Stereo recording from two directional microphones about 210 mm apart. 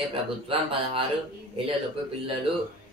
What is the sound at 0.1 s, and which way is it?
Speech, 25° right (ahead or behind).